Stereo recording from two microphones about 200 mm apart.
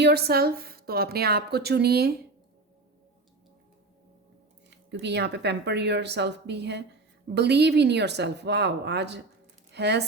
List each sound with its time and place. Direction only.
0.0 s a woman's voice: 55° right (ahead or behind)
4.7 s speech: 60° right (ahead or behind)